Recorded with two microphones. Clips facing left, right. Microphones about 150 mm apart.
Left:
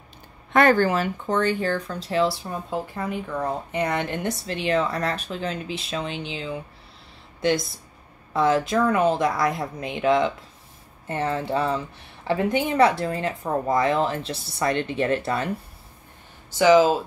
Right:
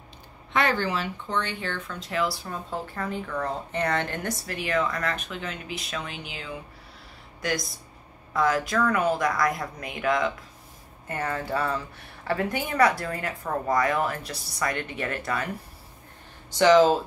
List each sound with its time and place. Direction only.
0.5 s speech: 50° left (ahead or behind); by 2.3 s 30° left (ahead or behind)
2.4 s speech: 15° left (ahead or behind)
16.4 s speech: 5° left (ahead or behind)